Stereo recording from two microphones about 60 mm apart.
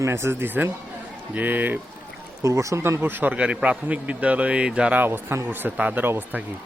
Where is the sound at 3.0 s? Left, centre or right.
Right; by 4.9 s centre.